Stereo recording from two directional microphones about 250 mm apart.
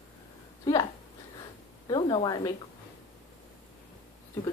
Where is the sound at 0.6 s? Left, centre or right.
Centre.